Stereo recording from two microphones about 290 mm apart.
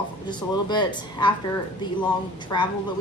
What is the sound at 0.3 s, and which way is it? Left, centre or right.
A woman's voice, centre.